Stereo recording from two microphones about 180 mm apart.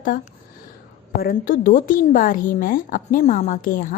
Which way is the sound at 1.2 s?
50° left (ahead or behind).